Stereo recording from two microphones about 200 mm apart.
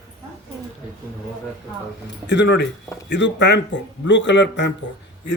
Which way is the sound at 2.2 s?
60° left (ahead or behind).